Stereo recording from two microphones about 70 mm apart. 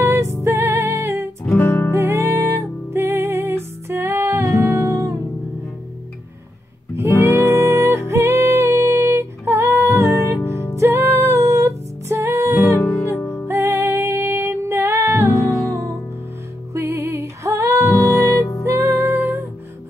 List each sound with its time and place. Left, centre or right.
0.0 s music: right
1.5 s music: left
2.0 s music: right
7.2 s music: right
12.7 s music: left
13.5 s music: right
16.7 s music: right